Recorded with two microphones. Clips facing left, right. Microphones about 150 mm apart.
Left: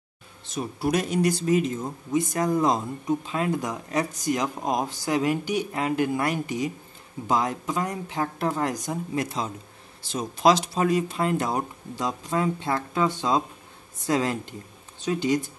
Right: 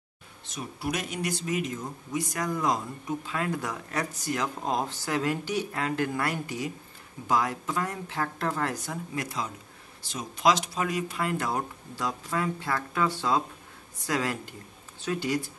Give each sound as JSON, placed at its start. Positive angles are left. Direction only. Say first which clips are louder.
{"t": 0.6, "sound": "speech", "louder": "left 7 dB", "side_deg": 35}